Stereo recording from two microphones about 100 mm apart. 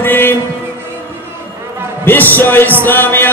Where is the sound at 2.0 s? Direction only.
20° left (ahead or behind).